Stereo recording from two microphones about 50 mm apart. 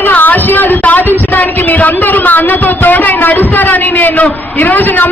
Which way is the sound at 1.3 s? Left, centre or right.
Left.